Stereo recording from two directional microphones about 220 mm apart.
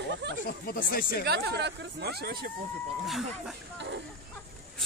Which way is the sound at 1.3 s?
45° right (ahead or behind).